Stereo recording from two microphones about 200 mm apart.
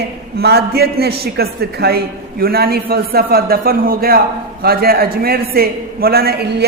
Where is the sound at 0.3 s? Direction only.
50° right (ahead or behind).